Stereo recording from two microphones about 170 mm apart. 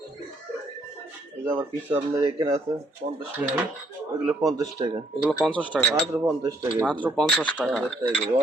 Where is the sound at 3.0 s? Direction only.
65° right (ahead or behind).